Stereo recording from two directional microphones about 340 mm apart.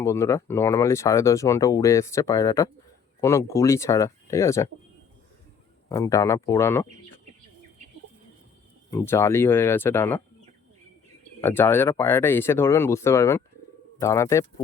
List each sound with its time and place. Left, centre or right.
0.0 s speech: centre
5.9 s speech: centre
8.9 s speech: centre
11.3 s speech: centre